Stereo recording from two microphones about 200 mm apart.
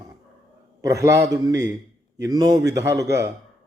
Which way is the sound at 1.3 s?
15° right (ahead or behind).